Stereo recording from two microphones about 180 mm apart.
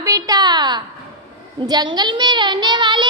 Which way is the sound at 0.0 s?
20° right (ahead or behind).